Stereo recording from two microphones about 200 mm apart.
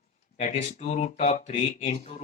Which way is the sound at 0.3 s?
35° left (ahead or behind).